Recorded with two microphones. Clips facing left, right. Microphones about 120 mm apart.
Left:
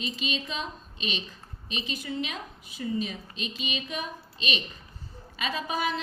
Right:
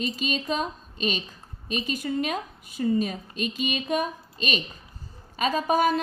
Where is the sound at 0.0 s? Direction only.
45° right (ahead or behind).